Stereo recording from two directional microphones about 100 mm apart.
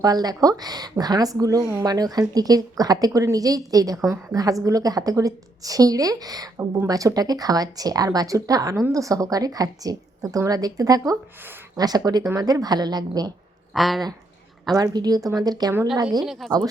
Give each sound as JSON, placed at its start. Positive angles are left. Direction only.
{"t": 0.0, "sound": "a woman's voice", "side_deg": -40}
{"t": 13.7, "sound": "speech", "side_deg": 0}
{"t": 14.8, "sound": "a woman's voice", "side_deg": -40}
{"t": 16.2, "sound": "speech", "side_deg": -5}